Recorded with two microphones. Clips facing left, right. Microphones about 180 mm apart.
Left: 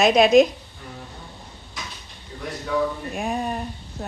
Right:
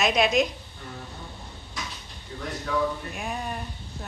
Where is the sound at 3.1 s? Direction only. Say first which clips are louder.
Left 6 dB; 35° left (ahead or behind).